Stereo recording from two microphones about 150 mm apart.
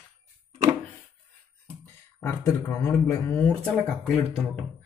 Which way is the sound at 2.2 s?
20° left (ahead or behind).